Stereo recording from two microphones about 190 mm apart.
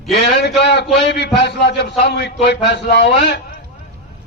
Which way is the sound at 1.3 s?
65° left (ahead or behind).